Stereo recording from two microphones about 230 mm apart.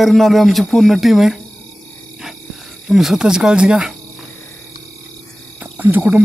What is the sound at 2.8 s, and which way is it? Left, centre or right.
Speech, centre.